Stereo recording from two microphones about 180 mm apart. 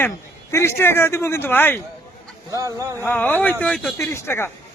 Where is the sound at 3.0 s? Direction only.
10° left (ahead or behind).